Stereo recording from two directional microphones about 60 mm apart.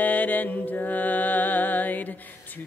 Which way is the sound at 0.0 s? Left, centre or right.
Left.